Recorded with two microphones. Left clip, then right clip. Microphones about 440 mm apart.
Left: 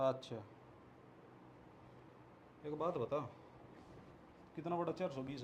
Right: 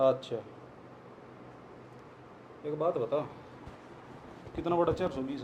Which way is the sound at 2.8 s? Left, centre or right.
Left.